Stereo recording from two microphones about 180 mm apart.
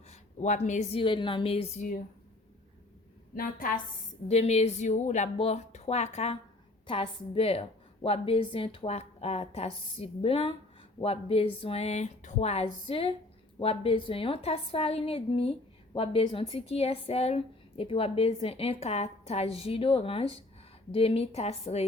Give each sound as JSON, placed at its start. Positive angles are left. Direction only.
{"t": 0.1, "sound": "speech", "side_deg": 40}
{"t": 1.0, "sound": "a woman's voice", "side_deg": 25}
{"t": 3.3, "sound": "a woman's voice", "side_deg": 50}
{"t": 4.3, "sound": "a woman's voice", "side_deg": 35}